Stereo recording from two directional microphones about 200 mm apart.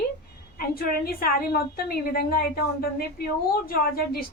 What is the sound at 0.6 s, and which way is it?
A woman's voice, 50° left (ahead or behind).